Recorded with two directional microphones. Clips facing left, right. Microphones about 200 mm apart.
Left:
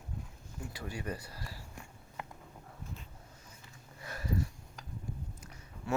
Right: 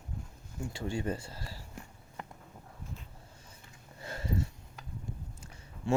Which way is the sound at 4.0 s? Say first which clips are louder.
Right 1 dB; 25° right (ahead or behind).